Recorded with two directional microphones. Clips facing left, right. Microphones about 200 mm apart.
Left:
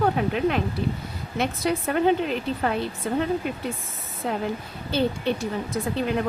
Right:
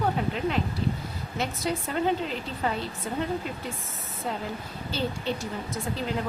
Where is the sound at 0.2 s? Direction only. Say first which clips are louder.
Left 4 dB; 60° left (ahead or behind).